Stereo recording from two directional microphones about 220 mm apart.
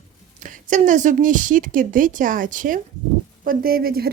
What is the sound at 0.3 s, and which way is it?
A woman's voice, 35° right (ahead or behind).